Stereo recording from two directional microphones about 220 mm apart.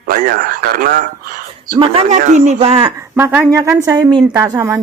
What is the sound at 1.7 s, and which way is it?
Speech, 30° right (ahead or behind).